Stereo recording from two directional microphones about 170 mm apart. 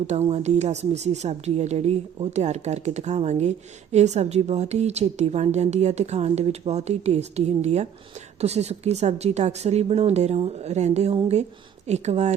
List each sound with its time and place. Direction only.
0.1 s a woman's voice: 40° right (ahead or behind)